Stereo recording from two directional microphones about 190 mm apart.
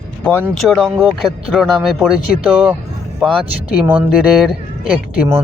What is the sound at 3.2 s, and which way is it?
Speech, 25° right (ahead or behind).